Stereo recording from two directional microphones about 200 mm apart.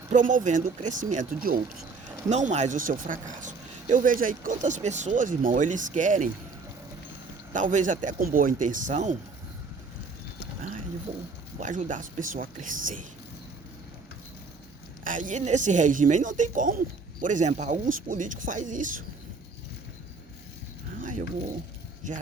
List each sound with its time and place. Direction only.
0.1 s speech: 40° right (ahead or behind)
2.3 s speech: 35° right (ahead or behind)
7.5 s speech: 40° right (ahead or behind)
11.6 s speech: 40° right (ahead or behind)
15.0 s speech: 40° right (ahead or behind)
21.0 s a sound: 40° right (ahead or behind)